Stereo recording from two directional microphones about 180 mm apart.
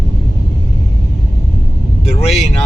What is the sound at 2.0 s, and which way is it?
Vehicle, 35° left (ahead or behind).